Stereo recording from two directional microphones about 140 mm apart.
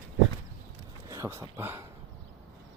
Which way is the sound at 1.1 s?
20° right (ahead or behind).